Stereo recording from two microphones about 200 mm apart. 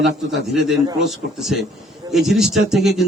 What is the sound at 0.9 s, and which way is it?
A man's voice, centre (ahead or behind).